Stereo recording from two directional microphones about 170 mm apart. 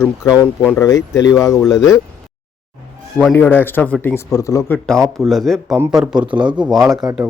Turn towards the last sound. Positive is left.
turn(degrees=-20)  # may be behind; listen again after turning